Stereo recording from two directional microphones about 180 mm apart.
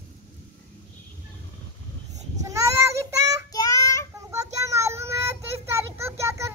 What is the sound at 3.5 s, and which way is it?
Child singing, 20° left (ahead or behind).